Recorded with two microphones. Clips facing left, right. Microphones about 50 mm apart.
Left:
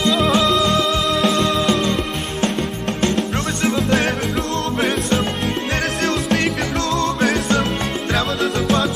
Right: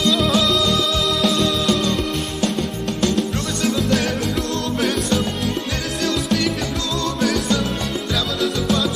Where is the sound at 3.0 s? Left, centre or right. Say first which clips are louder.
Left 1 dB; left.